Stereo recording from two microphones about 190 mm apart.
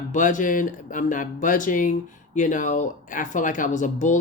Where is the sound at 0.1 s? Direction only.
40° left (ahead or behind).